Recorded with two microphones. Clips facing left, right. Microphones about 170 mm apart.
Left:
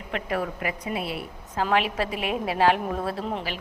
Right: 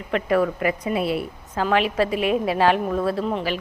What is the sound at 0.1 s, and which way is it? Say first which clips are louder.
Speech: right 8 dB; 55° right (ahead or behind).